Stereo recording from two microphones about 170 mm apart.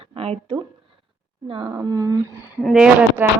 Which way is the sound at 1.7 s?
20° right (ahead or behind).